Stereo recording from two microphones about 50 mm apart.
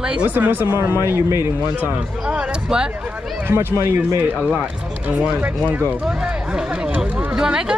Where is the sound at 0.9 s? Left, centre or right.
Right.